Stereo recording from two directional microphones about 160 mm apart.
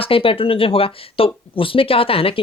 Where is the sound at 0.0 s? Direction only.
35° left (ahead or behind).